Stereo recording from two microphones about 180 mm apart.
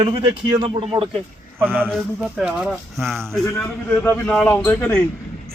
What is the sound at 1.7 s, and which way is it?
Speech, 5° left (ahead or behind).